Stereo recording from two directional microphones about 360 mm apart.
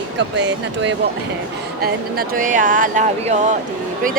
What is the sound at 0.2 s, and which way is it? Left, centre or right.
Speech, right.